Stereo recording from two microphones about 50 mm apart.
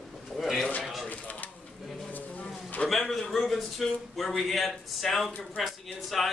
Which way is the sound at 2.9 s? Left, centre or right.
Centre.